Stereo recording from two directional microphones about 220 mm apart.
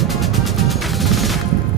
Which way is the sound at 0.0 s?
Centre (ahead or behind).